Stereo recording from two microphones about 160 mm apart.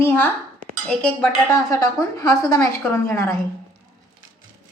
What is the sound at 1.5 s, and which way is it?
A woman's voice, 20° left (ahead or behind).